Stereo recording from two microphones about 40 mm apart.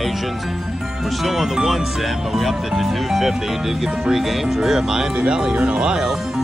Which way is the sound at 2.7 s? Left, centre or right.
Centre.